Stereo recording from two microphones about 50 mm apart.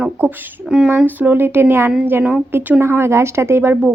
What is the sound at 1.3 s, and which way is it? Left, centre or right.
A woman's voice, right.